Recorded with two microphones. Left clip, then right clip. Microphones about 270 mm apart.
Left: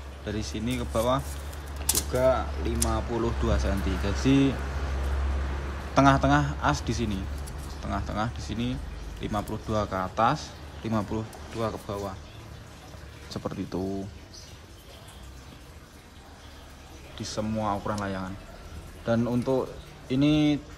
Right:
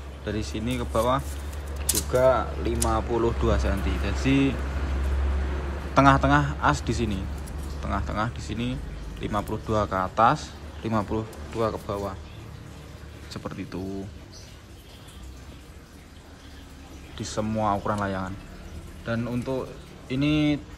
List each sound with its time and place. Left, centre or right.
0.2 s a man's voice: centre
5.9 s a man's voice: centre
13.3 s a man's voice: centre
17.2 s speech: centre